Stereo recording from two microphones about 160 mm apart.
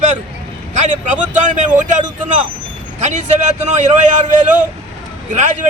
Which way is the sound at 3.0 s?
50° right (ahead or behind).